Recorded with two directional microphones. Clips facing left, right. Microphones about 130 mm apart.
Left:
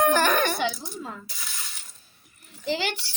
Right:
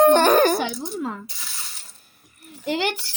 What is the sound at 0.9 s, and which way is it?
Coin, 65° right (ahead or behind).